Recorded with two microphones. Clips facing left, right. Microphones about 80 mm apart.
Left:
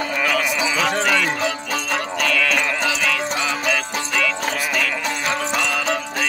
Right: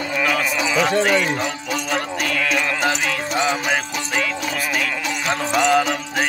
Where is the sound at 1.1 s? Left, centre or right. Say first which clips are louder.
Even; left.